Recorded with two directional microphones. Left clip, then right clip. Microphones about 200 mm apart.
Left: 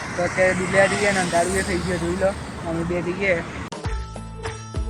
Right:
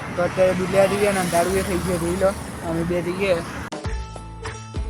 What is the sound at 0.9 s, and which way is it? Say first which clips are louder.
Speech: even; 60° right (ahead or behind).